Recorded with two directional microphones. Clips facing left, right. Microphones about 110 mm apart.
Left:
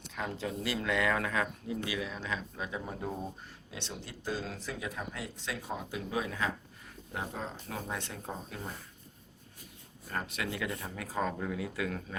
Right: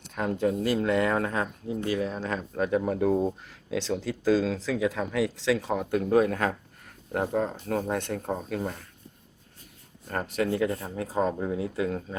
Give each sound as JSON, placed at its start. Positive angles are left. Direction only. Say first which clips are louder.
{"t": 0.1, "sound": "speech", "louder": "right 10 dB", "side_deg": -55}
{"t": 3.4, "sound": "speech", "louder": "right 14 dB", "side_deg": -90}
{"t": 10.1, "sound": "speech", "louder": "right 9 dB", "side_deg": -40}